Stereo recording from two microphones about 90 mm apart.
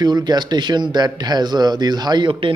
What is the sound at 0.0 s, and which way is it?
A man's voice, 50° right (ahead or behind).